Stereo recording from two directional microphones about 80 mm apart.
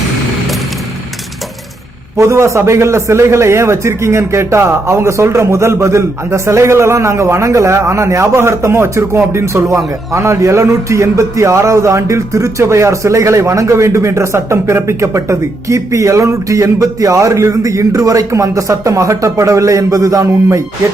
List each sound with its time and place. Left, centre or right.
2.1 s a man's voice: right